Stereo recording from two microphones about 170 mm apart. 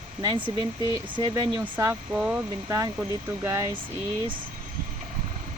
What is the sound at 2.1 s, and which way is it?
Speech, 5° right (ahead or behind).